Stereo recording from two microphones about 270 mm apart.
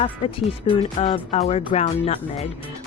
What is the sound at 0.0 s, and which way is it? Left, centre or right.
Speech, centre.